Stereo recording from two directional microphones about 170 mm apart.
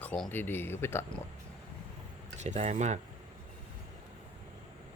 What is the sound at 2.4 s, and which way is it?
Speech, 45° right (ahead or behind).